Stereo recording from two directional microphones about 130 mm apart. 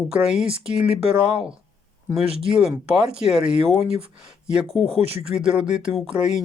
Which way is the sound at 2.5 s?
5° right (ahead or behind).